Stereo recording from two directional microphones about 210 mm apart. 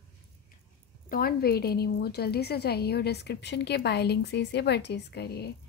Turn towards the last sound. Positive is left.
turn(degrees=50)  # may be behind; listen again after turning